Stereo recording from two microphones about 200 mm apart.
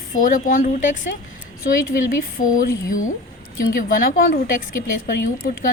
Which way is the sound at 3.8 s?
45° left (ahead or behind).